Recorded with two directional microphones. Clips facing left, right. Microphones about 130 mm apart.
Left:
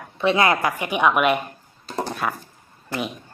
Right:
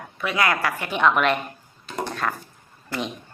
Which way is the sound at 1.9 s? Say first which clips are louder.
Left 2 dB; 35° left (ahead or behind).